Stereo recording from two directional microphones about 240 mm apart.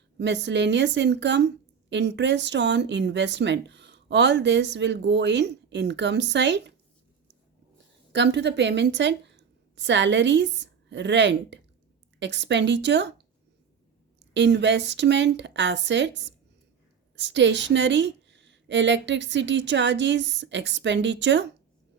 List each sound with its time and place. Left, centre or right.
0.2 s speech: right
8.1 s a woman's voice: right
14.2 s speech: right